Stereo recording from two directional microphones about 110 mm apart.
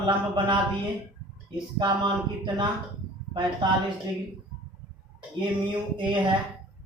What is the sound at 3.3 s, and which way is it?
Speech, 45° right (ahead or behind).